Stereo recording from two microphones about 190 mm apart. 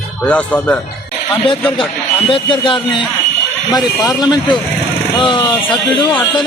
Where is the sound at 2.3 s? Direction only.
25° left (ahead or behind).